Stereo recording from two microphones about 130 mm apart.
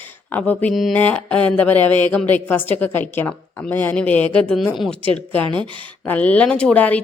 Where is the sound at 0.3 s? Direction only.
10° left (ahead or behind).